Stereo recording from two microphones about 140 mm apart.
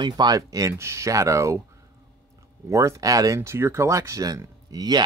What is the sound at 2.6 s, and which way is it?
Speech, 20° right (ahead or behind).